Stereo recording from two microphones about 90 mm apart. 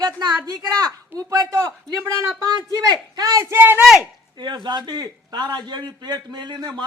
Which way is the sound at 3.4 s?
25° right (ahead or behind).